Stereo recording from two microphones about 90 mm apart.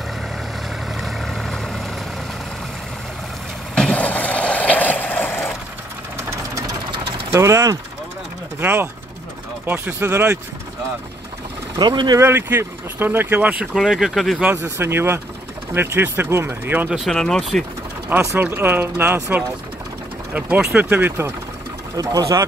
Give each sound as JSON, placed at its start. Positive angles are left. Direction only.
{"t": 0.8, "sound": "vehicle", "side_deg": 0}
{"t": 3.7, "sound": "vehicle", "side_deg": 10}
{"t": 7.3, "sound": "speech", "side_deg": -35}
{"t": 8.5, "sound": "speech", "side_deg": -20}
{"t": 11.7, "sound": "speech", "side_deg": -60}
{"t": 12.2, "sound": "speech", "side_deg": -25}
{"t": 13.7, "sound": "speech", "side_deg": -5}
{"t": 14.4, "sound": "speech", "side_deg": -20}
{"t": 16.9, "sound": "speech", "side_deg": 0}
{"t": 18.3, "sound": "speech", "side_deg": -25}
{"t": 20.3, "sound": "speech", "side_deg": -15}
{"t": 21.9, "sound": "speech", "side_deg": -40}